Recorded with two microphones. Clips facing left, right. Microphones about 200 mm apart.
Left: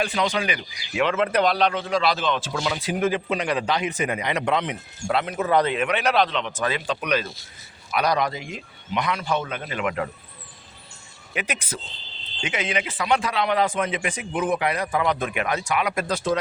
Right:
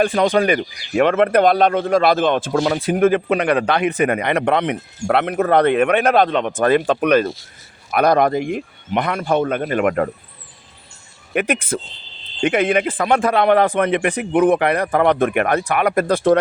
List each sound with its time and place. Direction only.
0.0 s a man's voice: 50° right (ahead or behind)
11.3 s a man's voice: 55° right (ahead or behind)